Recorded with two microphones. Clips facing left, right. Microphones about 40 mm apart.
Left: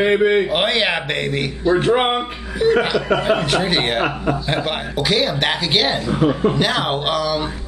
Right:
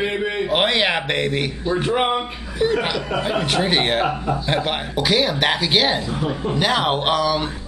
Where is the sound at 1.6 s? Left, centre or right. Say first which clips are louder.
Left 7 dB; left.